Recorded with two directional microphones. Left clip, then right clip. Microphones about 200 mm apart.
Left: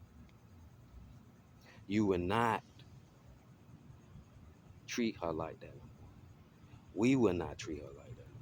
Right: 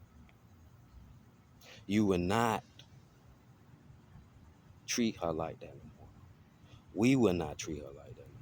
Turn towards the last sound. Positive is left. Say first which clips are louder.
# right 2 dB
turn(degrees=-35)  # may be behind; listen again after turning